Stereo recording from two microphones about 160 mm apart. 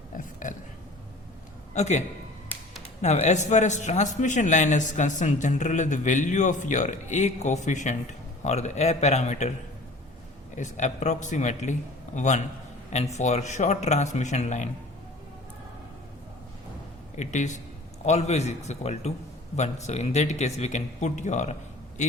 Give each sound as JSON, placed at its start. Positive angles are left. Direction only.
{"t": 0.1, "sound": "a sound", "side_deg": 55}
{"t": 1.7, "sound": "a man's voice", "side_deg": 45}
{"t": 10.5, "sound": "a man's voice", "side_deg": 50}
{"t": 17.2, "sound": "a man's voice", "side_deg": 50}